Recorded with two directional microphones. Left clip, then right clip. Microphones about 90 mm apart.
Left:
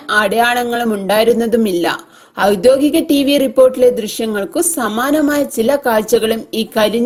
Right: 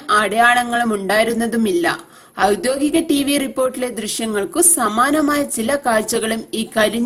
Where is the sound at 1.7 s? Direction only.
40° left (ahead or behind).